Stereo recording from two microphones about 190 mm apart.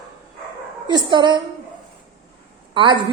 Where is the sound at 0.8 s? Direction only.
25° right (ahead or behind).